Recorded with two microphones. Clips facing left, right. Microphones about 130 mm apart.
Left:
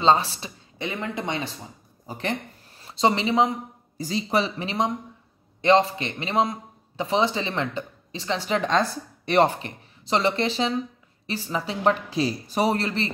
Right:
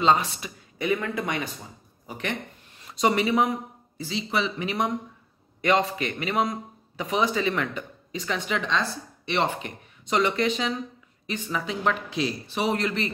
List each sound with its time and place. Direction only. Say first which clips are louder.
0.0 s a man's voice: left 2 dB; 30° left (ahead or behind)
4.0 s a man's voice: left 3 dB; 40° left (ahead or behind)